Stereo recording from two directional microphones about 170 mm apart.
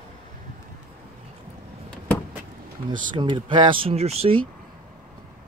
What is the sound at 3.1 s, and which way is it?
Speech, 25° right (ahead or behind).